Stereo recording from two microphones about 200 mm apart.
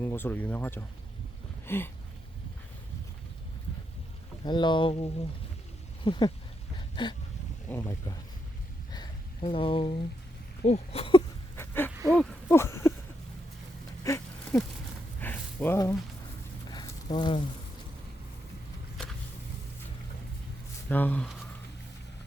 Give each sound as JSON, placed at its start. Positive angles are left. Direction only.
{"t": 0.0, "sound": "speech", "side_deg": 10}
{"t": 1.6, "sound": "a sound", "side_deg": 10}
{"t": 4.4, "sound": "speech", "side_deg": 25}
{"t": 6.1, "sound": "speech", "side_deg": 20}
{"t": 6.7, "sound": "a sound", "side_deg": 25}
{"t": 7.7, "sound": "speech", "side_deg": 10}
{"t": 8.9, "sound": "a sound", "side_deg": 25}
{"t": 10.6, "sound": "speech", "side_deg": 30}
{"t": 11.5, "sound": "dog", "side_deg": 10}
{"t": 12.1, "sound": "speech", "side_deg": 5}
{"t": 14.0, "sound": "wheeze", "side_deg": 15}
{"t": 15.2, "sound": "a sound", "side_deg": 10}
{"t": 20.9, "sound": "speech", "side_deg": 10}